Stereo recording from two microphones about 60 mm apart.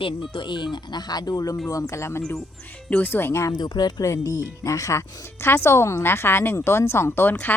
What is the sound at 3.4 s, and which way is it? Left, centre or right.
Speech, left.